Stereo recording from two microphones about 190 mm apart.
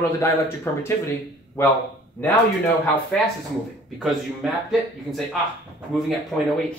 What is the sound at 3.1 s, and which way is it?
Speech, 5° left (ahead or behind).